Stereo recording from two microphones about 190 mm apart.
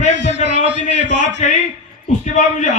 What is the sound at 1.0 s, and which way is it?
Speech, 70° right (ahead or behind).